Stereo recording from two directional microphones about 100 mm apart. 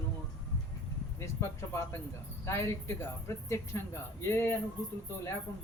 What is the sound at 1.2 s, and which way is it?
Speech, 25° left (ahead or behind).